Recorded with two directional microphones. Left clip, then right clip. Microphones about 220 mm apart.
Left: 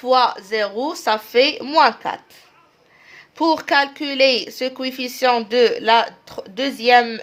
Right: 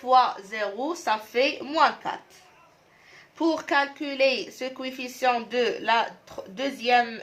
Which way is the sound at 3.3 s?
45° left (ahead or behind).